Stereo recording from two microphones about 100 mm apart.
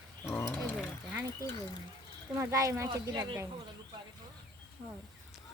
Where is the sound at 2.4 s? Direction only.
30° right (ahead or behind).